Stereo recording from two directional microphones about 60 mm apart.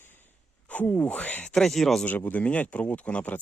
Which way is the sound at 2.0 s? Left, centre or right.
Left.